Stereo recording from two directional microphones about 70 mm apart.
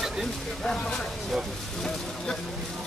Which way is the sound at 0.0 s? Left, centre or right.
Centre.